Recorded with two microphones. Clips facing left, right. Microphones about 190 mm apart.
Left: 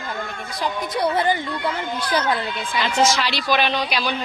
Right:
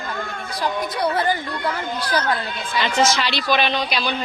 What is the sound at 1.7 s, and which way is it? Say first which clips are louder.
Speech: right 1 dB; 25° left (ahead or behind).